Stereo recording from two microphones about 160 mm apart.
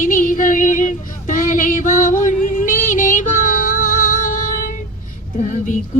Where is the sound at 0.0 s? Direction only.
60° left (ahead or behind).